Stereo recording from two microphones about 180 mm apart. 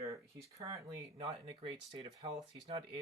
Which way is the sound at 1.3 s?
25° right (ahead or behind).